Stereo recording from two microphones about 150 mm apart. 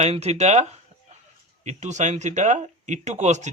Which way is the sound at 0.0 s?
45° right (ahead or behind).